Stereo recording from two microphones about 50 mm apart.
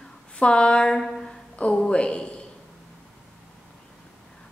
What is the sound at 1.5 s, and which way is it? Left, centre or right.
Music, left.